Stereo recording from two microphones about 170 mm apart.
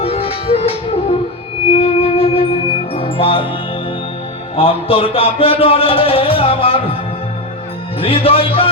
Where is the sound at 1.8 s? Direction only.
35° left (ahead or behind).